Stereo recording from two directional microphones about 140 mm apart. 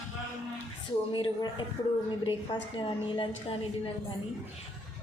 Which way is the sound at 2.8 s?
35° left (ahead or behind).